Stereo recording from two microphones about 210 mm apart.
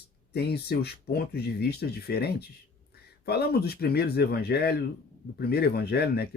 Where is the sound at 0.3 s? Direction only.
50° left (ahead or behind).